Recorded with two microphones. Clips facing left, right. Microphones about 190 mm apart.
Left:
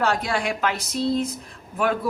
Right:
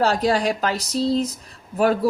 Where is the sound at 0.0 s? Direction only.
35° right (ahead or behind).